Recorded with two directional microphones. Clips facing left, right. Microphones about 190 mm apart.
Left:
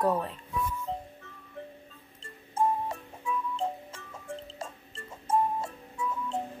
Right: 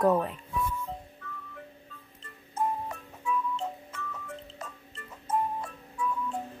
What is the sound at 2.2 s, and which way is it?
Music, 30° left (ahead or behind).